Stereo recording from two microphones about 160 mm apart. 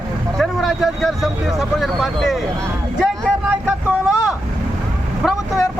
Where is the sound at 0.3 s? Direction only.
Centre (ahead or behind).